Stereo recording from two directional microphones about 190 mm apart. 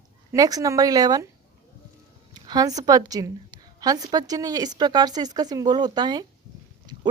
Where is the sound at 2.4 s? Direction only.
20° right (ahead or behind).